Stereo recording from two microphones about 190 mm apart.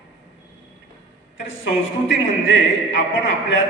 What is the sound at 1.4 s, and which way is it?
A man's voice, 75° left (ahead or behind).